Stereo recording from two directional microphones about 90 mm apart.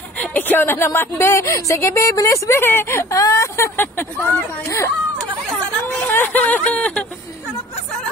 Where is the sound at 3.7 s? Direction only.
25° left (ahead or behind).